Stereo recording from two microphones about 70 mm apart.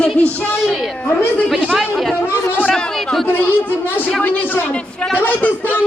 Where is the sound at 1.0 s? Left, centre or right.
Left.